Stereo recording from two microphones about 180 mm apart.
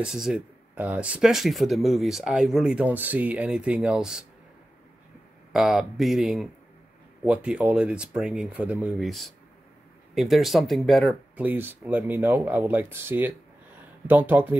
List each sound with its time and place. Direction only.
0.0 s speech: 5° right (ahead or behind)
5.5 s speech: centre (ahead or behind)
11.4 s speech: 10° right (ahead or behind)